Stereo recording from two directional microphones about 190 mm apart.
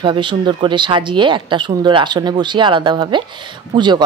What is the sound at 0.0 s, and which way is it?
Speech, 25° right (ahead or behind).